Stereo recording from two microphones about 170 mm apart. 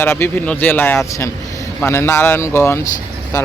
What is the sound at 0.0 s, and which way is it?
Speech, 15° left (ahead or behind).